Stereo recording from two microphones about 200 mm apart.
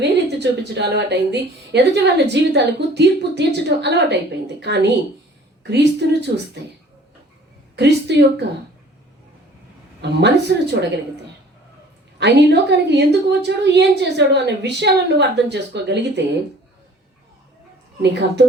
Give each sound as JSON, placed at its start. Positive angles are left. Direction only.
{"t": 0.0, "sound": "a woman's voice", "side_deg": -60}
{"t": 7.8, "sound": "a woman's voice", "side_deg": -60}
{"t": 10.0, "sound": "a woman's voice", "side_deg": -60}
{"t": 12.2, "sound": "a woman's voice", "side_deg": -60}
{"t": 18.0, "sound": "a woman's voice", "side_deg": -60}